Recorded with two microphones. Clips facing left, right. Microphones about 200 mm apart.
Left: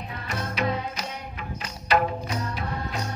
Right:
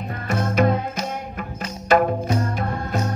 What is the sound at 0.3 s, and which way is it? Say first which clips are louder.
Music: right 8 dB; 45° right (ahead or behind).